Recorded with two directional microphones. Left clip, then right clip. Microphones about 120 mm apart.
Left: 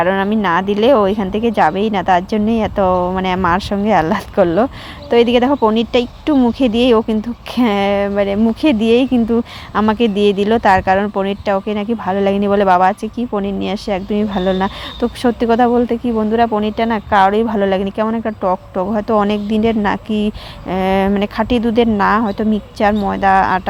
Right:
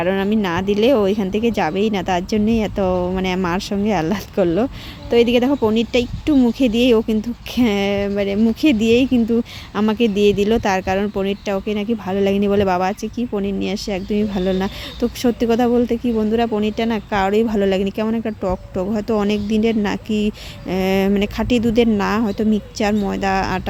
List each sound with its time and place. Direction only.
0.0 s a woman's voice: 20° right (ahead or behind)